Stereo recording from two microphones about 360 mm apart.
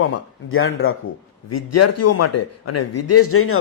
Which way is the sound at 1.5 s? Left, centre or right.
Left.